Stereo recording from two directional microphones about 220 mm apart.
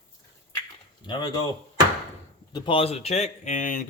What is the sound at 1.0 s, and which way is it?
Speech, 20° left (ahead or behind).